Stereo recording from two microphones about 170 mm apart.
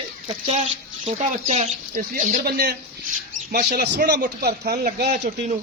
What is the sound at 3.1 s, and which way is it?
Rodents, 50° right (ahead or behind).